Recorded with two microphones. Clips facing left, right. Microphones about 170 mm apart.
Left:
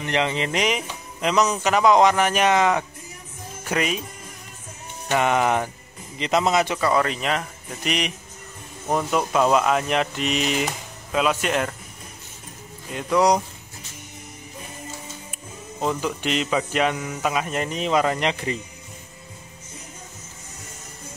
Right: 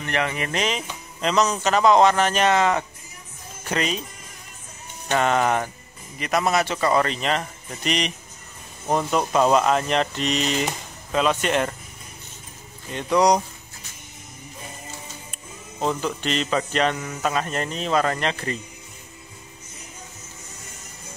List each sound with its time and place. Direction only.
0.0 s speech: 20° left (ahead or behind)
5.1 s speech: 15° left (ahead or behind)
6.8 s speech: centre (ahead or behind)
12.9 s speech: 5° left (ahead or behind)
15.9 s speech: 10° left (ahead or behind)